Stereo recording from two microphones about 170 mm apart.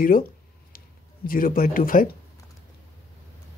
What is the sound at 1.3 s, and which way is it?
Speech, 55° left (ahead or behind).